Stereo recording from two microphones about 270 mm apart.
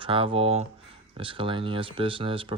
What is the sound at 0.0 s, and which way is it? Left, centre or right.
Speech, centre.